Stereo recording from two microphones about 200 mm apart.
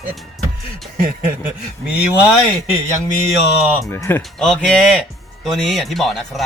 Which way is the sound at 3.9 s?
10° left (ahead or behind).